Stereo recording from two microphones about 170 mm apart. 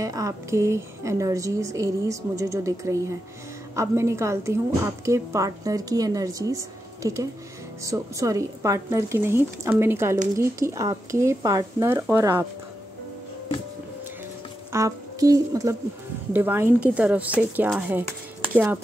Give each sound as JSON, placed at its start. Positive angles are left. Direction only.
{"t": 0.0, "sound": "a woman's voice", "side_deg": -20}
{"t": 14.7, "sound": "a woman's voice", "side_deg": -20}